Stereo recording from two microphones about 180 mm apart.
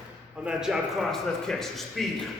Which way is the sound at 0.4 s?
5° right (ahead or behind).